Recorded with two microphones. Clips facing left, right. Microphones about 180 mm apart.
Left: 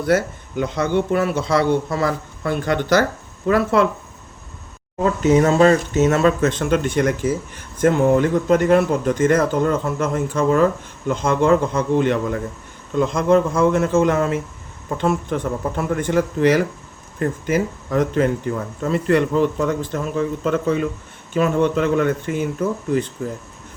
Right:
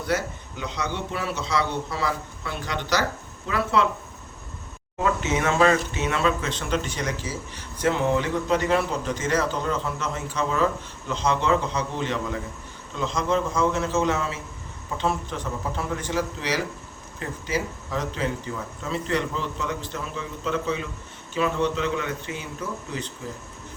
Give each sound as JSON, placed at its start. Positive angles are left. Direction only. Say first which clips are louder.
{"t": 0.0, "sound": "speech", "louder": "left 8 dB", "side_deg": 50}
{"t": 5.0, "sound": "a man's voice", "louder": "left 9 dB", "side_deg": 40}